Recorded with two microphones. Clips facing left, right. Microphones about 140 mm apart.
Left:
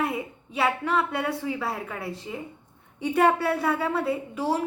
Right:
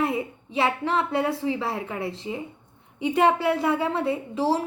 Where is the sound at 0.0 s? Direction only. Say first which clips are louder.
Right 3 dB; 25° right (ahead or behind).